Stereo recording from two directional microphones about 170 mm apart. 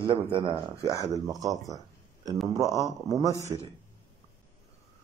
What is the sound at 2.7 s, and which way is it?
Speech, 20° left (ahead or behind).